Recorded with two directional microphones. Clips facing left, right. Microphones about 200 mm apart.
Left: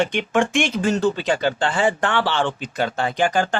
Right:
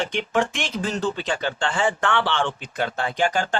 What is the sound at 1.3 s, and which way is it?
Speech, 35° left (ahead or behind).